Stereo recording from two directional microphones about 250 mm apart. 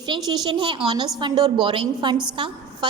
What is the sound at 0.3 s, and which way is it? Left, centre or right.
A woman's voice, centre.